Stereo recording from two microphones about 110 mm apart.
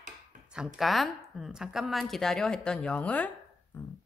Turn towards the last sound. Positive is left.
turn(degrees=25)  # may be behind; listen again after turning